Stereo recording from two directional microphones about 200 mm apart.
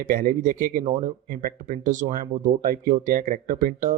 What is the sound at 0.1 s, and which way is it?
Speech, 45° right (ahead or behind).